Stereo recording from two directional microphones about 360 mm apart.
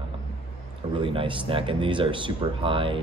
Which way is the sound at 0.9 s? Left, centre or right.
Centre.